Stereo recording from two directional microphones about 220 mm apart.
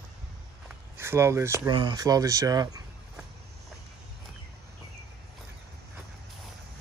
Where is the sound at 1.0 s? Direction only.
10° right (ahead or behind).